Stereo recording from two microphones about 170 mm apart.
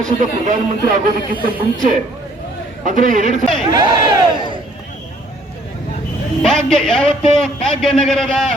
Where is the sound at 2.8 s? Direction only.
50° right (ahead or behind).